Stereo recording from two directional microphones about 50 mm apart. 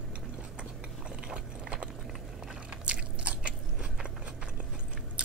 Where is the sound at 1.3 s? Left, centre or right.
Right.